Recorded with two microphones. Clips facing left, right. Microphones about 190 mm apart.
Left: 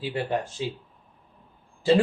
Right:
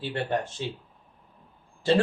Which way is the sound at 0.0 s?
10° left (ahead or behind).